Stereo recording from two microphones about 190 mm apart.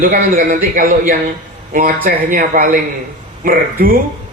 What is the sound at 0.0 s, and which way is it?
Speech, 45° right (ahead or behind).